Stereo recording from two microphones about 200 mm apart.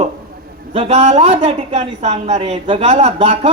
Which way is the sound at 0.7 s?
30° right (ahead or behind).